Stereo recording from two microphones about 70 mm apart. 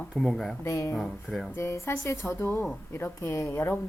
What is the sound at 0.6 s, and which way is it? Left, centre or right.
A woman's voice, left.